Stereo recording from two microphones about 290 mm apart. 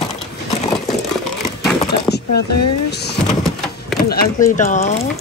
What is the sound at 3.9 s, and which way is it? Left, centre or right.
Speech, left.